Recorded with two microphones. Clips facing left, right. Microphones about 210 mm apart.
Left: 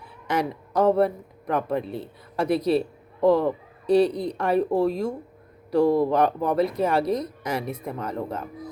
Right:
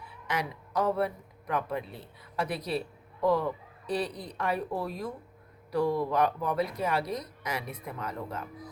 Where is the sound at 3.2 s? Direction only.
30° left (ahead or behind).